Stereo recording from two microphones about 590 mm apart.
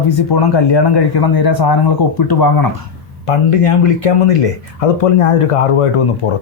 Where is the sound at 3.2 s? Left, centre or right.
Left.